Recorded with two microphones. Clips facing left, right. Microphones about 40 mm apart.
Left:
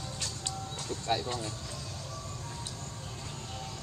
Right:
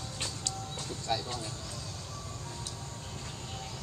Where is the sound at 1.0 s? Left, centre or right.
Left.